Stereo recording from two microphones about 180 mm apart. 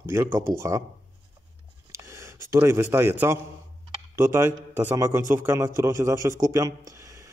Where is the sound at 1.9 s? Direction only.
15° right (ahead or behind).